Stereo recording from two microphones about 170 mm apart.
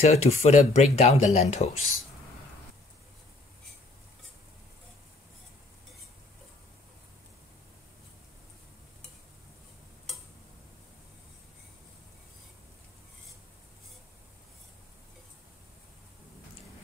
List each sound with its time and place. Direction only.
0.0 s speech: 40° left (ahead or behind)